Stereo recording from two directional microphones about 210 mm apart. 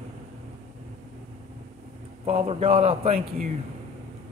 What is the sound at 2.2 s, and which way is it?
Speech, 25° right (ahead or behind).